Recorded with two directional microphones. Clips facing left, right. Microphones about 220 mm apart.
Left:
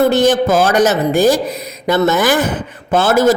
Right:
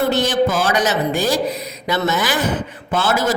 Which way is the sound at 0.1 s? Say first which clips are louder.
Left 5 dB; 50° left (ahead or behind).